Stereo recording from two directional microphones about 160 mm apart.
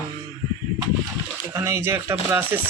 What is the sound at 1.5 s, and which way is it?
Speech, 15° right (ahead or behind).